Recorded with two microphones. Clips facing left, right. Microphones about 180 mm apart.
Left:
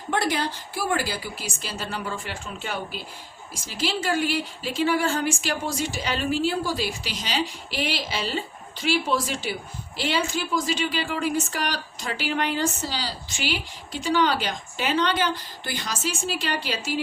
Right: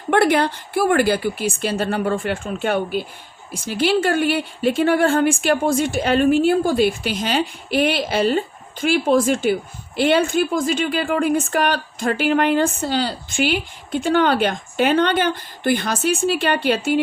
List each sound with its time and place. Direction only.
0.1 s speech: 60° right (ahead or behind)